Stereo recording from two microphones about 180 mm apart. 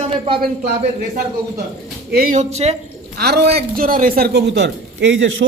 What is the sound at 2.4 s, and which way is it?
Speech, 35° right (ahead or behind).